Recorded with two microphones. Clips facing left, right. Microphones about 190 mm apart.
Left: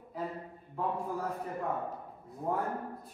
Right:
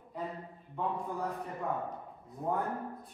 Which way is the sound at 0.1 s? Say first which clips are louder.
Left 1 dB; centre (ahead or behind).